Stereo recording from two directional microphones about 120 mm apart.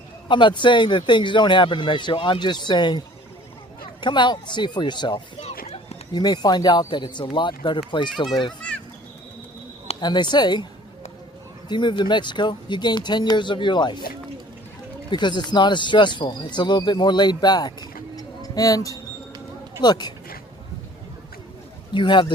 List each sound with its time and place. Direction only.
0.3 s speech: 40° left (ahead or behind)
4.0 s speech: 40° left (ahead or behind)
5.4 s a sound: 55° left (ahead or behind)
6.1 s speech: 35° left (ahead or behind)
10.0 s speech: 40° left (ahead or behind)
11.7 s speech: 40° left (ahead or behind)
15.1 s speech: 40° left (ahead or behind)
21.9 s speech: 40° left (ahead or behind)